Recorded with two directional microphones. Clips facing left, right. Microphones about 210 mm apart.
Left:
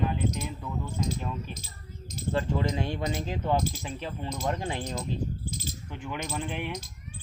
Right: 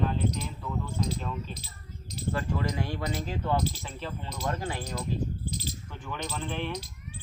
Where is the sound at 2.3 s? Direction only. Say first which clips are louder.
Left 4 dB; 25° left (ahead or behind).